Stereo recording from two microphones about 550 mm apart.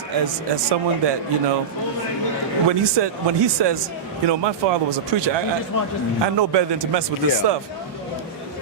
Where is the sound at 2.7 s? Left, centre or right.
Right.